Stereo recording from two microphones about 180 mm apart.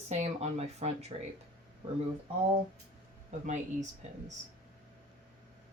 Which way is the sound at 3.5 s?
40° right (ahead or behind).